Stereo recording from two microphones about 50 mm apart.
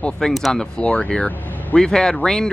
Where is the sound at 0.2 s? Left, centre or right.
Centre.